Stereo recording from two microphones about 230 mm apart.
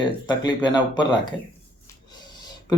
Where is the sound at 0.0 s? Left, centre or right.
Centre.